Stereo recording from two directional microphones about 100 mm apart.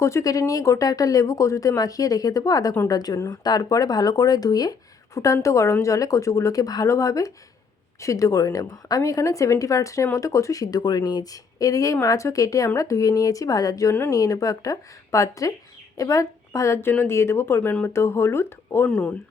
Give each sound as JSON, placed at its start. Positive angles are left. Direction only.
{"t": 0.0, "sound": "a woman's voice", "side_deg": 30}
{"t": 18.9, "sound": "speech", "side_deg": 15}